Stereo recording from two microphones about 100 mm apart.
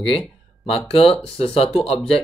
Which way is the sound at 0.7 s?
75° left (ahead or behind).